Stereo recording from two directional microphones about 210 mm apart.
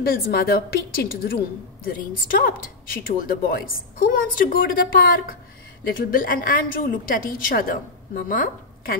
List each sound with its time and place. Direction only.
0.0 s a woman's voice: 45° left (ahead or behind)